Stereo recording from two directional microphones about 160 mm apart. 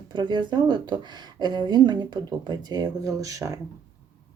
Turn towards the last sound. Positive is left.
turn(degrees=-20)  # may be behind; listen again after turning